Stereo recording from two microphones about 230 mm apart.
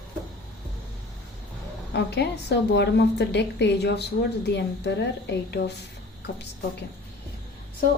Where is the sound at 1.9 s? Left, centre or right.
Left.